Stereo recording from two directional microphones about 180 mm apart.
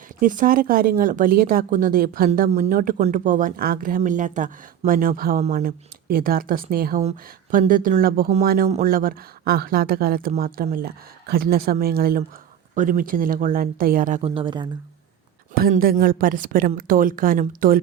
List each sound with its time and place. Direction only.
0.2 s speech: 50° right (ahead or behind)
5.4 s speech: 40° right (ahead or behind)
5.6 s speech: 55° right (ahead or behind)
12.7 s speech: 45° right (ahead or behind)
14.2 s speech: 30° right (ahead or behind)
15.5 s speech: 55° right (ahead or behind)